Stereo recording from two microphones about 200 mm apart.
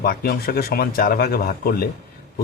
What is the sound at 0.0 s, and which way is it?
Speech, 50° left (ahead or behind).